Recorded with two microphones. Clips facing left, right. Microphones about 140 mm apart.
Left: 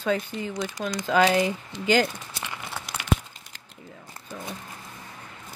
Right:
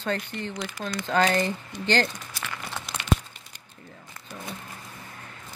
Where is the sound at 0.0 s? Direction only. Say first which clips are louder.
Left 3 dB; 5° left (ahead or behind).